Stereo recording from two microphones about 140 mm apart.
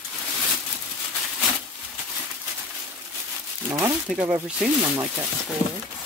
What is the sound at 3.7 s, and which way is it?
Speech, 20° right (ahead or behind).